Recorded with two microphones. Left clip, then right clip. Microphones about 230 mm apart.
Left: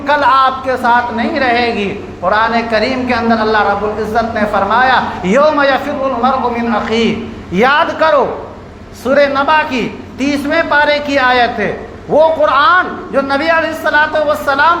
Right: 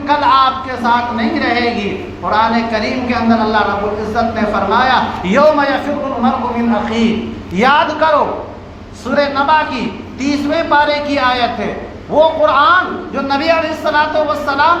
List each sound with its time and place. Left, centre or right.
0.1 s a man's voice: left